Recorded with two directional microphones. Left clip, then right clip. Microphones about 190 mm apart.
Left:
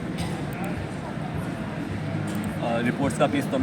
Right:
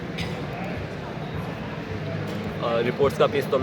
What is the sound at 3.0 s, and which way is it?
Speech, 25° right (ahead or behind).